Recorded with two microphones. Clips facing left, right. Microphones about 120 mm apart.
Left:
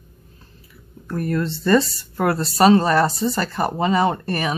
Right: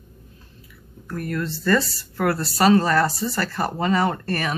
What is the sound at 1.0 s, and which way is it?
Speech, 25° left (ahead or behind).